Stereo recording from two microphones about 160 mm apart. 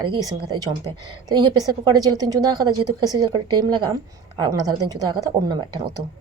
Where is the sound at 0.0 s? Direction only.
25° right (ahead or behind).